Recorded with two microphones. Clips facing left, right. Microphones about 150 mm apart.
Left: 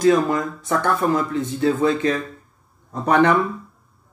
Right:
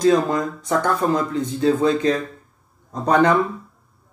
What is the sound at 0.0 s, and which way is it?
Speech, 20° right (ahead or behind).